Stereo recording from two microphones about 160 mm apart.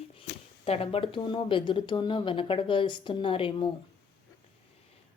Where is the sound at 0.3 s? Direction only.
90° left.